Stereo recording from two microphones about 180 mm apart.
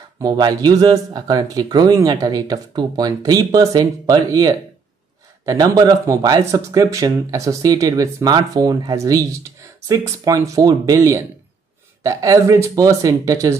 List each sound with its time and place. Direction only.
0.2 s speech: 20° right (ahead or behind)